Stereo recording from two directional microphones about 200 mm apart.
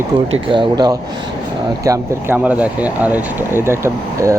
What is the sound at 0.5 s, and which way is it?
Speech, 20° right (ahead or behind).